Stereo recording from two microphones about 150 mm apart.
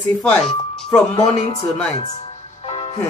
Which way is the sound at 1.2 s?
45° left (ahead or behind).